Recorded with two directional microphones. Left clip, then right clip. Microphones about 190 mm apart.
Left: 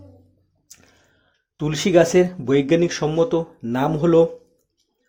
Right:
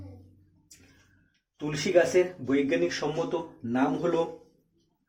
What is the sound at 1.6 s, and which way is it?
Speech, 50° left (ahead or behind).